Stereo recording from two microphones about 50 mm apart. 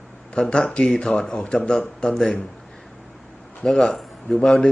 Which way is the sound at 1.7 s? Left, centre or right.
Centre.